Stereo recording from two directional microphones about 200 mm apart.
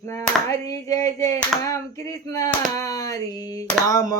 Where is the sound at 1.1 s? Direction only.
15° left (ahead or behind).